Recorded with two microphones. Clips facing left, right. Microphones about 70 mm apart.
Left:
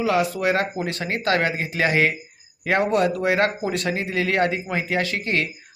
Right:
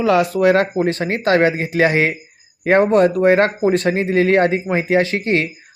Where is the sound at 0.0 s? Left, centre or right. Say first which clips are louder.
Right 7 dB; right.